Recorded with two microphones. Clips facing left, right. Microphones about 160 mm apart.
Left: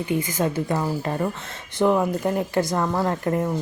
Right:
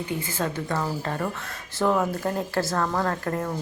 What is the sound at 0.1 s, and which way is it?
A woman's voice, 15° left (ahead or behind).